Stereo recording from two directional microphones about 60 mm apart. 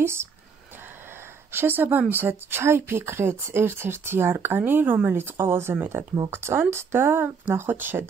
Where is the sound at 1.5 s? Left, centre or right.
Right.